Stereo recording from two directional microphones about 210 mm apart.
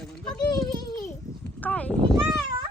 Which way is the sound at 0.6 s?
15° left (ahead or behind).